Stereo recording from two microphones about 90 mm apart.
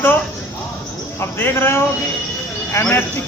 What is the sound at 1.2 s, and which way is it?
Speech, 25° left (ahead or behind).